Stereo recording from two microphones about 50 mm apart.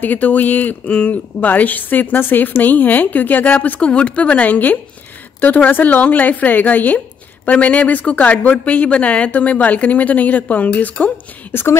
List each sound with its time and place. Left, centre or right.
0.0 s a woman's voice: left